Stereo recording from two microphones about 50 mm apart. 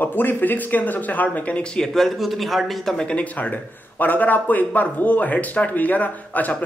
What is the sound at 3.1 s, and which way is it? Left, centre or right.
Speech, left.